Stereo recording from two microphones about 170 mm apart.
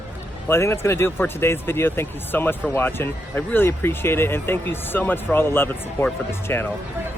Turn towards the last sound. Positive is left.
turn(degrees=15)  # may be behind; listen again after turning